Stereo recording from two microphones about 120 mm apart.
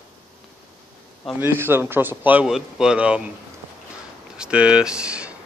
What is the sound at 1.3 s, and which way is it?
A man's voice, 20° right (ahead or behind).